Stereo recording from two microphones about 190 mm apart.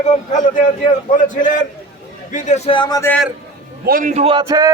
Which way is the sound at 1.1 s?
45° left (ahead or behind).